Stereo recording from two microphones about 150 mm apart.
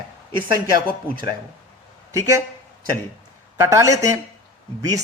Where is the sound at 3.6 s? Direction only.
20° right (ahead or behind).